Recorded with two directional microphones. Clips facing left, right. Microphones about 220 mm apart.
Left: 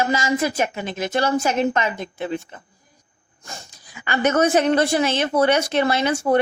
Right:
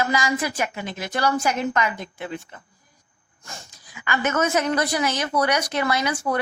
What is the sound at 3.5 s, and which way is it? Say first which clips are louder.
Speech: left 3 dB; 35° left (ahead or behind).